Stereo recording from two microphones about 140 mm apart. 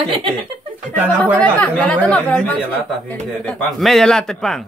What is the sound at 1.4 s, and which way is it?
A man's voice, 10° left (ahead or behind).